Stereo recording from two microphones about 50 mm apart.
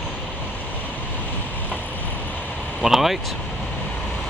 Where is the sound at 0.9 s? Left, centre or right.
Left.